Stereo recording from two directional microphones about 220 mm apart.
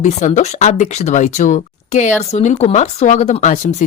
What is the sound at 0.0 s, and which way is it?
Speech, 35° left (ahead or behind).